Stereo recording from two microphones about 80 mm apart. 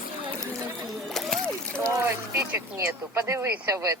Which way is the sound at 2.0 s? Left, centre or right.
Right.